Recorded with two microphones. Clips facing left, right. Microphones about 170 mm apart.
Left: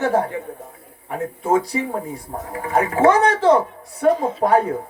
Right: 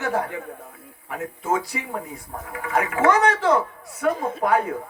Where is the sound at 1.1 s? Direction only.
30° left (ahead or behind).